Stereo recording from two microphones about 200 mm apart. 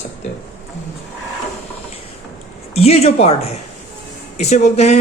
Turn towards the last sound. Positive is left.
turn(degrees=30)  # may be behind; listen again after turning